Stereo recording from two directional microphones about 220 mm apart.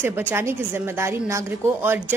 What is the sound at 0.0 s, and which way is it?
A woman's voice, 10° right (ahead or behind).